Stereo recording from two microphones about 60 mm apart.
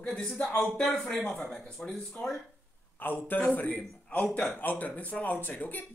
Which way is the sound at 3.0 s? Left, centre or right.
Left.